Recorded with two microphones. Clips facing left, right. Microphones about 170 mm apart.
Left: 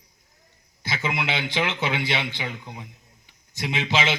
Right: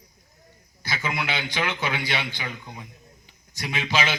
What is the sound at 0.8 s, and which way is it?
A man's voice, 25° left (ahead or behind).